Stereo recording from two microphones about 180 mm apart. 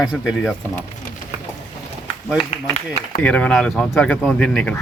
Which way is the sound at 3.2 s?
5° left (ahead or behind).